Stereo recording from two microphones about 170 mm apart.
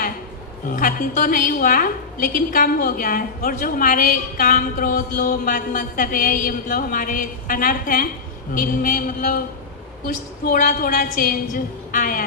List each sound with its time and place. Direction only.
0.7 s a woman's voice: 55° left (ahead or behind)
10.4 s a woman's voice: 55° left (ahead or behind)